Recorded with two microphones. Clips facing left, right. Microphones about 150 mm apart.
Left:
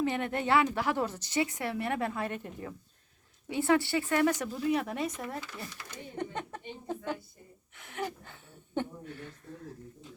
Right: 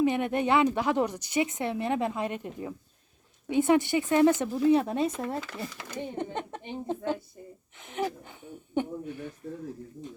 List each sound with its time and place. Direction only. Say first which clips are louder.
0.0 s a woman's voice: right 5 dB; 15° right (ahead or behind)
5.6 s speech: right 8 dB; 90° right
6.1 s a woman's voice: right 3 dB; 25° right (ahead or behind)
7.8 s a sound: right 5 dB; 20° right (ahead or behind)